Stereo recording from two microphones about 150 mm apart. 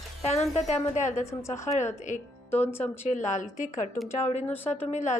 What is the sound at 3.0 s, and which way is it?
A woman's voice, 55° left (ahead or behind).